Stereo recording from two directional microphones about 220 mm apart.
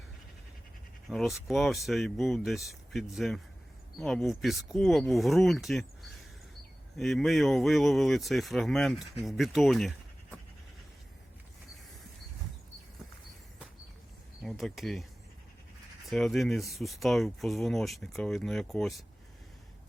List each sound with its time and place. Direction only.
1.1 s speech: centre (ahead or behind)
14.4 s speech: centre (ahead or behind)
16.0 s speech: centre (ahead or behind)